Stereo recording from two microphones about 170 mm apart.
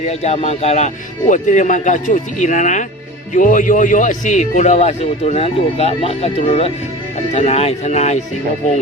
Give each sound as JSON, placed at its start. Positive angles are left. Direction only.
{"t": 0.0, "sound": "a man's voice", "side_deg": 40}